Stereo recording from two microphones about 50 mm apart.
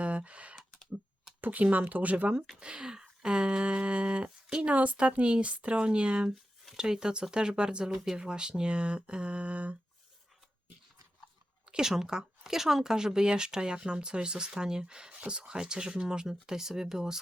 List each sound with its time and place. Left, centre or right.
0.0 s computer keyboard: right
1.4 s speech: right
2.6 s speech: centre
7.9 s speech: centre; by 9.7 s right
11.7 s speech: centre